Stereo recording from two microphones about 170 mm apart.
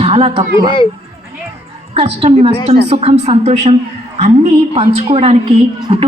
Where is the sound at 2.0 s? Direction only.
35° right (ahead or behind).